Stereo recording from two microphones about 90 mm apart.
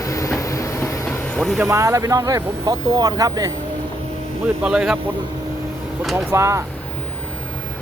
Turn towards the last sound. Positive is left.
turn(degrees=-30)  # may be behind; listen again after turning